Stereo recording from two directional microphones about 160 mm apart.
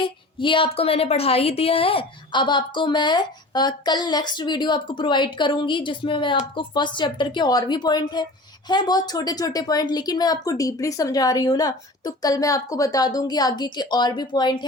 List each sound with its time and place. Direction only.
0.0 s a woman's voice: 30° left (ahead or behind)